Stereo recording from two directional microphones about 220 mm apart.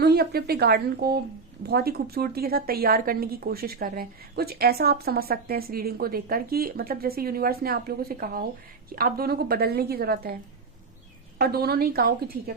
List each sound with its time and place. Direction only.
0.0 s a woman's voice: 45° right (ahead or behind)
11.3 s a woman's voice: 45° right (ahead or behind)